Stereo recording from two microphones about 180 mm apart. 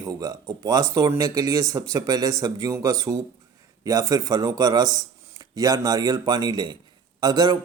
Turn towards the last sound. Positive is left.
turn(degrees=-25)  # may be behind; listen again after turning